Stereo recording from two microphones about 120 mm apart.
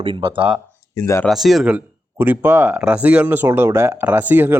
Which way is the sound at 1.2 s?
Centre (ahead or behind).